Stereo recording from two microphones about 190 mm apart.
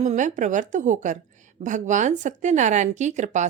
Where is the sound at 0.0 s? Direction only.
40° right (ahead or behind).